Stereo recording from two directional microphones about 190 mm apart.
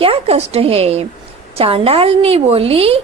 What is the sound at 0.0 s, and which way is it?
A woman's voice, 30° right (ahead or behind).